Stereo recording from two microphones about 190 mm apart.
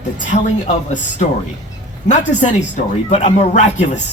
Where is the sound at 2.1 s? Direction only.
40° left (ahead or behind).